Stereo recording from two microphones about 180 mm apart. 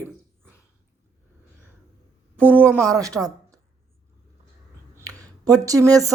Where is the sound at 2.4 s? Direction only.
10° right (ahead or behind).